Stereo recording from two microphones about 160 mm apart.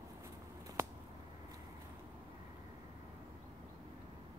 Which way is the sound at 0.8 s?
15° right (ahead or behind).